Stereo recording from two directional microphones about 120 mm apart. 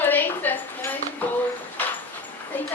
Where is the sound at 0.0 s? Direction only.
15° left (ahead or behind).